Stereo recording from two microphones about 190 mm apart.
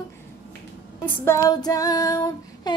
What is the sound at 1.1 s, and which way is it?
Female singing, 15° left (ahead or behind).